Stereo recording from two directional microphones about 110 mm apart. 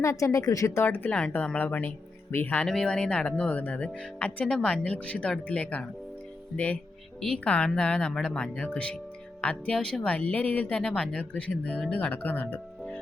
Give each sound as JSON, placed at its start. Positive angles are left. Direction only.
{"t": 0.0, "sound": "speech", "side_deg": 30}
{"t": 2.6, "sound": "speech", "side_deg": 5}
{"t": 7.2, "sound": "speech", "side_deg": 5}